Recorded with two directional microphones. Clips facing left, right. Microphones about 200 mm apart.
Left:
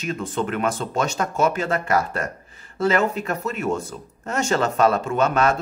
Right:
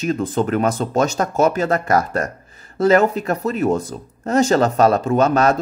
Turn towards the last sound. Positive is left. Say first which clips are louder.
# right 4 dB
turn(degrees=-40)  # may be behind; listen again after turning